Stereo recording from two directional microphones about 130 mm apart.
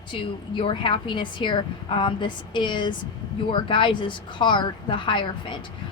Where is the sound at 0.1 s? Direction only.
40° left (ahead or behind).